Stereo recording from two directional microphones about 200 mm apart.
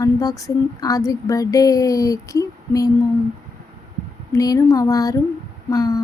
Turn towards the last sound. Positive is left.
turn(degrees=15)  # may be behind; listen again after turning